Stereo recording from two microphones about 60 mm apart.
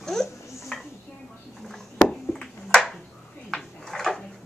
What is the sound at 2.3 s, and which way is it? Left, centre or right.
Ping, centre.